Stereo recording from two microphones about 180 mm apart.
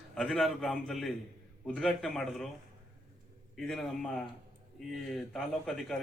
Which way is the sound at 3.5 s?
Centre (ahead or behind).